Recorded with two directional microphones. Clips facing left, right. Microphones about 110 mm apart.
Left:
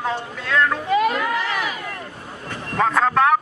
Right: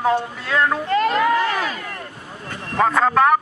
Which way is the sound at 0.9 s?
10° left (ahead or behind).